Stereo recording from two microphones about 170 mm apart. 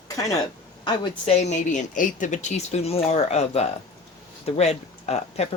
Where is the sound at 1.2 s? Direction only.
40° left (ahead or behind).